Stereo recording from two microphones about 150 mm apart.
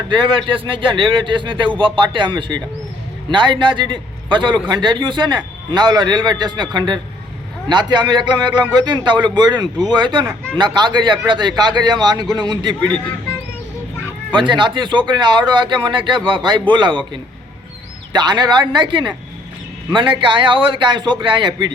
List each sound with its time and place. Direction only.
0.1 s a man's voice: 35° right (ahead or behind)
14.3 s a man's voice: 30° right (ahead or behind)